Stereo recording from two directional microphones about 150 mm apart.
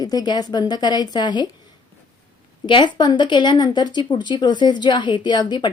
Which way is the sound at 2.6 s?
30° left (ahead or behind).